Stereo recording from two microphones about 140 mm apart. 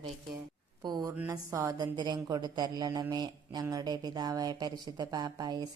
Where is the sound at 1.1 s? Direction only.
20° right (ahead or behind).